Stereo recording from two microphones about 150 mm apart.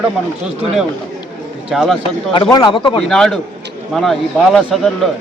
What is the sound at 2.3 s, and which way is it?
Speech, 30° left (ahead or behind).